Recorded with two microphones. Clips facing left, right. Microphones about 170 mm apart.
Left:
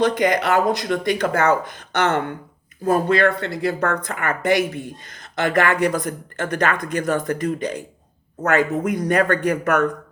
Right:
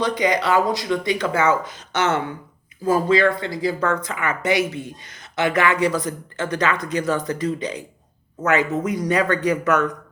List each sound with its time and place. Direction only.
0.0 s speech: 50° left (ahead or behind)